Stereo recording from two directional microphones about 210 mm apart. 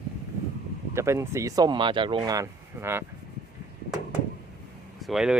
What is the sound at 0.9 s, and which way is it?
Speech, 15° right (ahead or behind).